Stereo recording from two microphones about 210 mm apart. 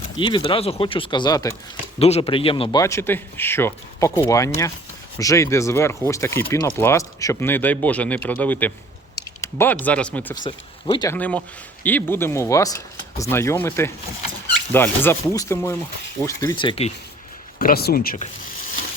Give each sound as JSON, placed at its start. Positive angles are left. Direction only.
{"t": 0.2, "sound": "speech", "side_deg": 25}
{"t": 2.0, "sound": "speech", "side_deg": 30}
{"t": 2.8, "sound": "speech", "side_deg": 10}
{"t": 10.9, "sound": "speech", "side_deg": 20}
{"t": 11.2, "sound": "speech", "side_deg": 5}
{"t": 17.6, "sound": "speech", "side_deg": 45}